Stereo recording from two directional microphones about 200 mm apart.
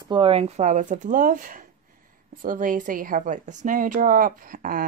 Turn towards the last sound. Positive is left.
turn(degrees=-45)  # may be behind; listen again after turning